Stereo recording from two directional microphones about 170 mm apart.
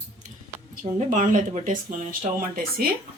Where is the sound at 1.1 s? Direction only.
45° right (ahead or behind).